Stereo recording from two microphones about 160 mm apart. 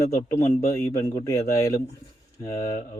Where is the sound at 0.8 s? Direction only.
20° left (ahead or behind).